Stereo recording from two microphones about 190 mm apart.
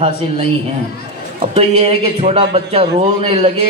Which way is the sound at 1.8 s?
30° right (ahead or behind).